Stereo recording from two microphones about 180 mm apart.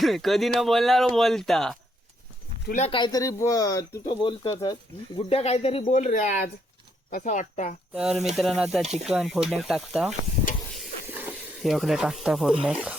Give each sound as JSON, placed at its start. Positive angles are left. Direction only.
{"t": 0.0, "sound": "speech", "side_deg": 0}
{"t": 2.7, "sound": "speech", "side_deg": 30}
{"t": 5.4, "sound": "speech", "side_deg": 35}
{"t": 7.9, "sound": "speech", "side_deg": 0}
{"t": 8.8, "sound": "speech", "side_deg": -35}
{"t": 9.0, "sound": "speech", "side_deg": 0}